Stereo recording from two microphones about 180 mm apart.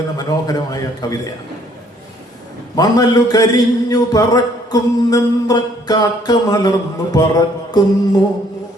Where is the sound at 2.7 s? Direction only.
20° left (ahead or behind).